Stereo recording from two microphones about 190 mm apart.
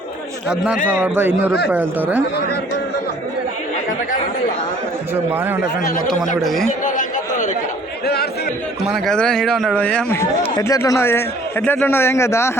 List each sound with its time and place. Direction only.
0.9 s a man's voice: 10° right (ahead or behind)
6.4 s a man's voice: centre (ahead or behind)
6.7 s chatter: 40° left (ahead or behind)
8.0 s chatter: 55° left (ahead or behind)
8.9 s a man's voice: 5° left (ahead or behind)